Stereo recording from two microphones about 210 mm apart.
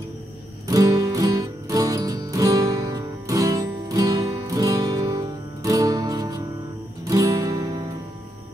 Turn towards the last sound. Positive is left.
turn(degrees=-20)  # may be behind; listen again after turning